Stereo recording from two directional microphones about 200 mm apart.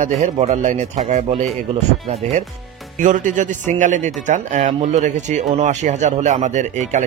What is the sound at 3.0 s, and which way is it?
Speech, 40° right (ahead or behind).